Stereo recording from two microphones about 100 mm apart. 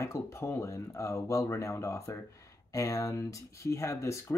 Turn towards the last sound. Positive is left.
turn(degrees=30)  # may be behind; listen again after turning